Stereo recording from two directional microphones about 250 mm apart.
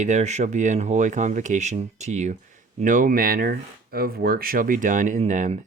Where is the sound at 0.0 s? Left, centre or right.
Right.